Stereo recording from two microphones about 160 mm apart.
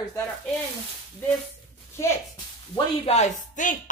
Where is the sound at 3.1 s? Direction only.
50° left (ahead or behind).